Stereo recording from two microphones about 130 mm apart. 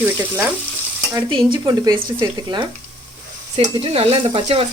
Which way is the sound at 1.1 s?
35° right (ahead or behind).